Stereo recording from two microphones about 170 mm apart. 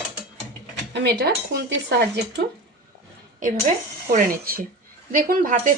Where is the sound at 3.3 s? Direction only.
50° right (ahead or behind).